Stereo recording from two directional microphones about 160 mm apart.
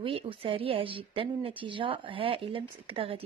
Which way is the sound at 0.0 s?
35° right (ahead or behind).